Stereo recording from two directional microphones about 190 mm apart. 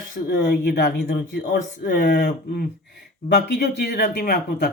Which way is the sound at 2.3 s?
50° left (ahead or behind).